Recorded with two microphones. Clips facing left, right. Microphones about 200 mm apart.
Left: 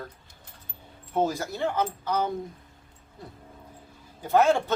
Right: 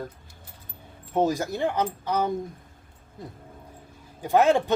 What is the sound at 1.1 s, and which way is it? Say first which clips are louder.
Speech: right 3 dB; 15° right (ahead or behind).